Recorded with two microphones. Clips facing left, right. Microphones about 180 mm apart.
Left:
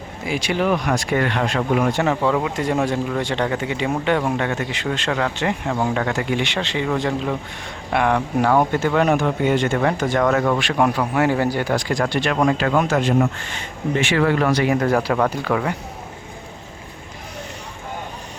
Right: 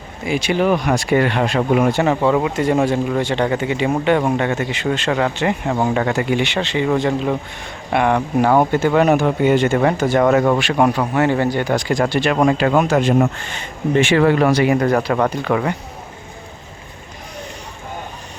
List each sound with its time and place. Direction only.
0.3 s speech: centre (ahead or behind)
8.4 s speech: 15° right (ahead or behind)
10.6 s speech: 5° right (ahead or behind)
12.1 s speech: 10° right (ahead or behind)
14.8 s speech: 5° left (ahead or behind)